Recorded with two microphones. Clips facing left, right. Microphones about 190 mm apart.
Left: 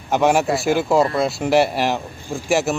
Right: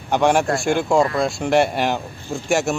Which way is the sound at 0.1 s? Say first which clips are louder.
Even; 5° left (ahead or behind).